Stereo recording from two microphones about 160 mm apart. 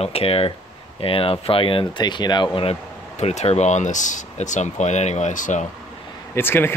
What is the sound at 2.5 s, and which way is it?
Speech, 40° left (ahead or behind).